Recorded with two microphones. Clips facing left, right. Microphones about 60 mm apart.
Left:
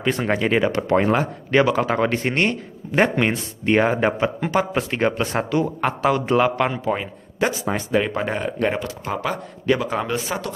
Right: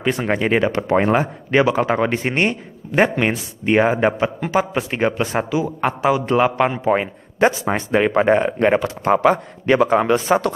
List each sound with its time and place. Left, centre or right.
0.0 s speech: centre
7.0 s speech: right